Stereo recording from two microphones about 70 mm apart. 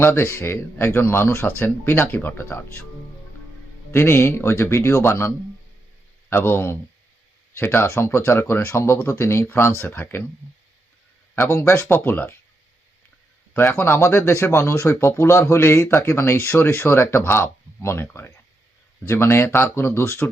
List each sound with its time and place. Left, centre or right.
0.0 s speech: left
3.9 s speech: left
6.3 s speech: left
11.3 s speech: left
11.9 s speech: left
13.7 s speech: left